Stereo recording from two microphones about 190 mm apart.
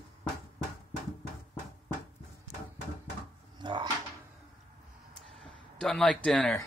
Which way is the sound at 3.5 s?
25° right (ahead or behind).